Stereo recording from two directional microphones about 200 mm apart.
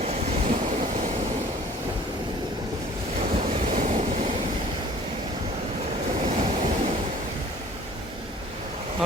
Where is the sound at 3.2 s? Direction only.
35° right (ahead or behind).